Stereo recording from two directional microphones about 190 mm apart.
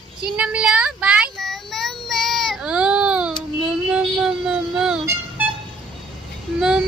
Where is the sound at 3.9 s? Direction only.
5° right (ahead or behind).